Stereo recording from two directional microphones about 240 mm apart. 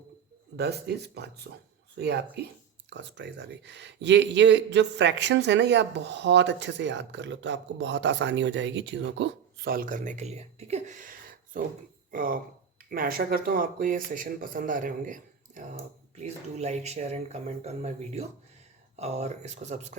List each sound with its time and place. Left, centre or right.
0.5 s speech: right